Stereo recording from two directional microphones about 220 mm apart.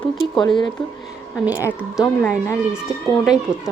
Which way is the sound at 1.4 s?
10° right (ahead or behind).